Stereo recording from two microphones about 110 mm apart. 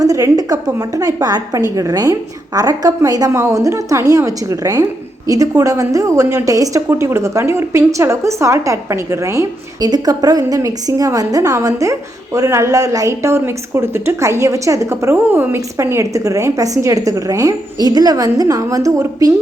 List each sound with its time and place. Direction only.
0.0 s a woman's voice: 35° right (ahead or behind)